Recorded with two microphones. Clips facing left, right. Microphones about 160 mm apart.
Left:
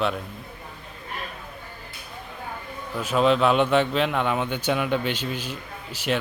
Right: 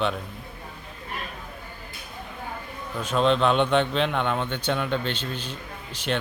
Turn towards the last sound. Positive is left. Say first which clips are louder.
# left 2 dB
turn(degrees=10)  # may be behind; listen again after turning